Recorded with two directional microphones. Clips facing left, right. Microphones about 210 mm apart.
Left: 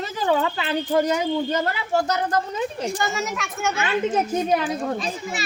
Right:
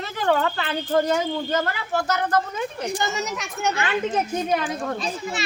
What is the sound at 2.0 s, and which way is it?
Speech, 35° left (ahead or behind).